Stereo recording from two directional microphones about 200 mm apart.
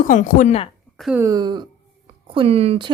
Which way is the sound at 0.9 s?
Centre (ahead or behind).